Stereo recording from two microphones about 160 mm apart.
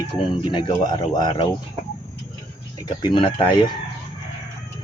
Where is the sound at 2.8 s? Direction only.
30° left (ahead or behind).